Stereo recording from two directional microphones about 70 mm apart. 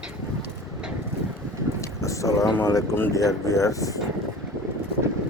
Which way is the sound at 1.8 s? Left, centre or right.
Left.